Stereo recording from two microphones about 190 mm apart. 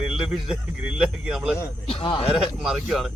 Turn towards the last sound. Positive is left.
turn(degrees=0)  # may be behind; listen again after turning